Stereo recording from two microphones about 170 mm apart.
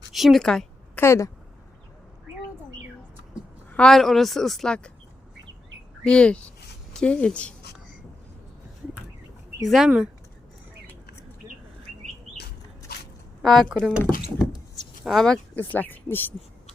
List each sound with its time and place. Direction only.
0.1 s a woman's voice: centre (ahead or behind)
1.0 s speech: 15° left (ahead or behind)
3.7 s a woman's voice: 5° left (ahead or behind)
6.0 s a woman's voice: 5° left (ahead or behind)
9.6 s a woman's voice: centre (ahead or behind)
12.9 s a sound: 65° left (ahead or behind)
13.4 s a woman's voice: centre (ahead or behind)
15.0 s speech: centre (ahead or behind)